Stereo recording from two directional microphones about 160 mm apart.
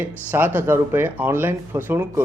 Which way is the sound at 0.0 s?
10° right (ahead or behind).